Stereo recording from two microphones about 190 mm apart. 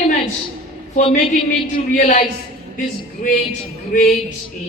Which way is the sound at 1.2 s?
25° left (ahead or behind).